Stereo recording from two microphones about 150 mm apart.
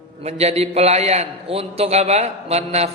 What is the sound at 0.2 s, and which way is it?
Speech, 45° right (ahead or behind).